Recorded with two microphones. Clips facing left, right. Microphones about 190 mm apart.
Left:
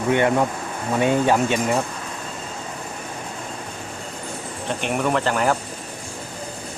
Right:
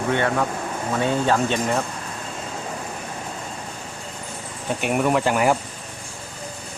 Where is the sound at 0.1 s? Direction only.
15° left (ahead or behind).